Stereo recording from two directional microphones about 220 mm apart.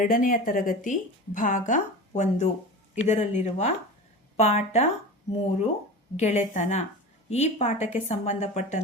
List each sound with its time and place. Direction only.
0.0 s speech: 35° left (ahead or behind)